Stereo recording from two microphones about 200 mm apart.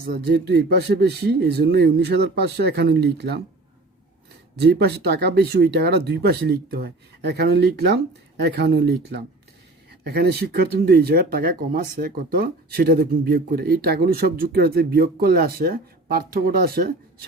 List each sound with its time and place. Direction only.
0.1 s speech: 55° right (ahead or behind)
4.6 s speech: 55° right (ahead or behind)